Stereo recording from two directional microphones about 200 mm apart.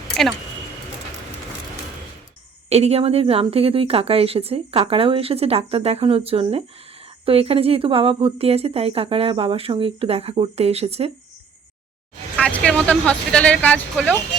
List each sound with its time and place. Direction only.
2.6 s speech: 30° right (ahead or behind)
12.4 s speech: 5° left (ahead or behind)